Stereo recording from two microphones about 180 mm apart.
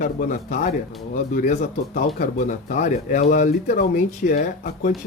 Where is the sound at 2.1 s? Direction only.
45° left (ahead or behind).